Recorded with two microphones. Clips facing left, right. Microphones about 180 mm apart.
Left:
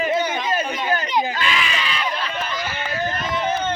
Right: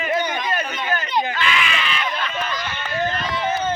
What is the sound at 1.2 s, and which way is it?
Crowd, 35° left (ahead or behind).